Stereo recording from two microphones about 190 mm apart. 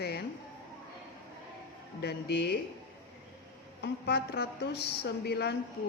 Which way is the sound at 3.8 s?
60° left (ahead or behind).